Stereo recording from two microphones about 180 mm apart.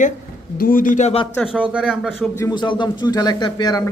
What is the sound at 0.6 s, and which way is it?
Speech, 50° left (ahead or behind).